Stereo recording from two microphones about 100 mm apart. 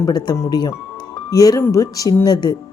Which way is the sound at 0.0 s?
45° left (ahead or behind).